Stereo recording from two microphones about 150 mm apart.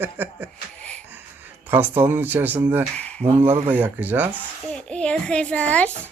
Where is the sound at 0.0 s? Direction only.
15° right (ahead or behind).